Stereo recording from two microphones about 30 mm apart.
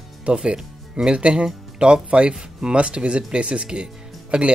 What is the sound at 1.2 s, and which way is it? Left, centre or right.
Speech, right.